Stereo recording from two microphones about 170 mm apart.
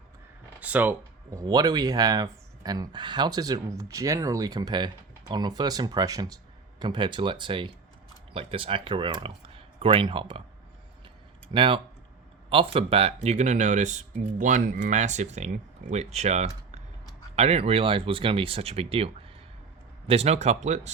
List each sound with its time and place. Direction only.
0.6 s speech: 10° right (ahead or behind); by 10.4 s 30° right (ahead or behind)
11.5 s speech: 30° right (ahead or behind)